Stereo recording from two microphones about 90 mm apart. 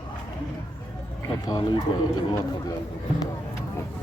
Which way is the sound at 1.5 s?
45° left (ahead or behind).